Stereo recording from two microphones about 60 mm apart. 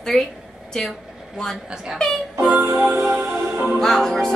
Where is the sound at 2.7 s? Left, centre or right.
Right.